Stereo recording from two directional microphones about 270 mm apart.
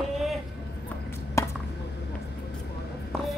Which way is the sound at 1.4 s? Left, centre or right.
Centre.